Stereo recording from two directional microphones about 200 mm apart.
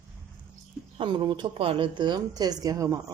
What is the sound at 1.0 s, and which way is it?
Speech, 25° right (ahead or behind).